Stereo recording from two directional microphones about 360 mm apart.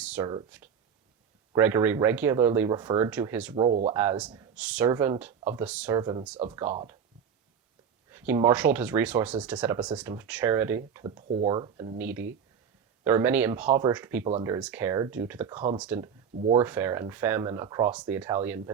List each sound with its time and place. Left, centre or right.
0.0 s speech: centre
1.5 s speech: centre
3.5 s speech: centre
3.9 s speech: centre
8.3 s speech: centre